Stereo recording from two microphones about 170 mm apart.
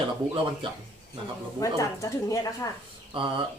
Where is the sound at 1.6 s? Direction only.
20° left (ahead or behind).